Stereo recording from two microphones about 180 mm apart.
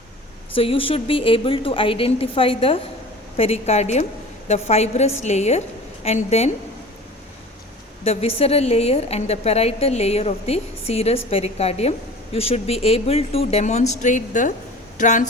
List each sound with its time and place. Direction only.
0.5 s a woman's voice: 30° left (ahead or behind)
8.0 s a woman's voice: 35° left (ahead or behind)